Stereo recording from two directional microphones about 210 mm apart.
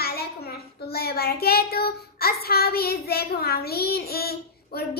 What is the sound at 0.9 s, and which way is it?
Child singing, 50° left (ahead or behind).